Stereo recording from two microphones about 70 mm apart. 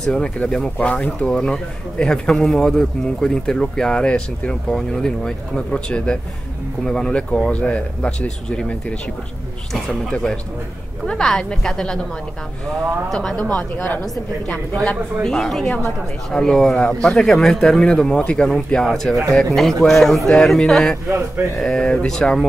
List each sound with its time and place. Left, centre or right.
0.0 s speech: centre
13.1 s a man's voice: centre
13.6 s speech: left
15.2 s a man's voice: centre
21.1 s speech: right
21.5 s speech: centre